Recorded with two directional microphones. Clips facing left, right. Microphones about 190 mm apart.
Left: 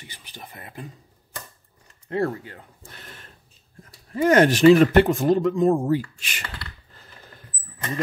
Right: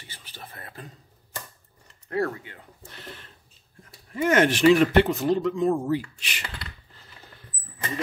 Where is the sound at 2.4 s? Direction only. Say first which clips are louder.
Left 3 dB; 45° left (ahead or behind).